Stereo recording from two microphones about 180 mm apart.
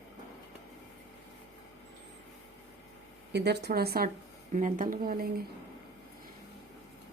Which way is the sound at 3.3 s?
65° right (ahead or behind).